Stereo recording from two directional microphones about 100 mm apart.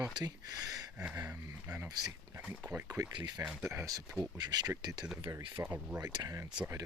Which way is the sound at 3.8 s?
35° right (ahead or behind).